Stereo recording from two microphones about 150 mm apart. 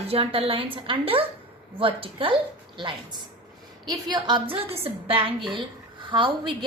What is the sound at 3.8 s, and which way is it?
A woman's voice, 30° right (ahead or behind).